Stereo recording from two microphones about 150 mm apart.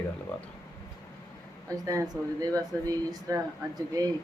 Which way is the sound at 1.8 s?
20° right (ahead or behind).